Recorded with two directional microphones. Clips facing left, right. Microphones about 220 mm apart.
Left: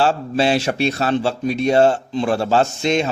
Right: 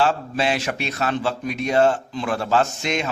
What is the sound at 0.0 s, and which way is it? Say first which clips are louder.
Speech: left 4 dB; 30° left (ahead or behind).